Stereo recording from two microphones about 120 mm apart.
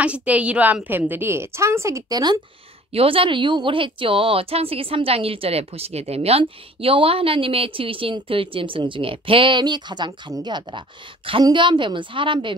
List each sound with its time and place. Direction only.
0.0 s a woman's voice: 10° right (ahead or behind); by 2.4 s 30° right (ahead or behind)
2.9 s a woman's voice: 50° right (ahead or behind)